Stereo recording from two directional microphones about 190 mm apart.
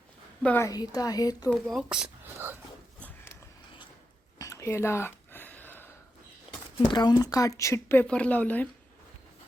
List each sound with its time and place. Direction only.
0.4 s a woman's voice: 10° left (ahead or behind)
1.6 s speech: 5° right (ahead or behind)
4.4 s a sound: 15° left (ahead or behind)
6.8 s speech: 25° left (ahead or behind)